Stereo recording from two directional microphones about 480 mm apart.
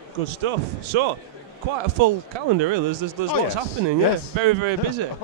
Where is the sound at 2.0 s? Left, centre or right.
Right.